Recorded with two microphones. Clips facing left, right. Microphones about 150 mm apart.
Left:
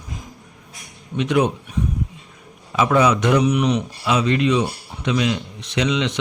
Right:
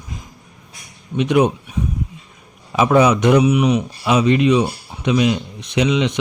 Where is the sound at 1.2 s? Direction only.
15° right (ahead or behind).